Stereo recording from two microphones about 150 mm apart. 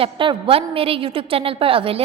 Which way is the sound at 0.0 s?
35° right (ahead or behind).